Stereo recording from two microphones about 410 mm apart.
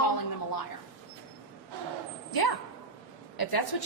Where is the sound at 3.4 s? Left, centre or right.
Left.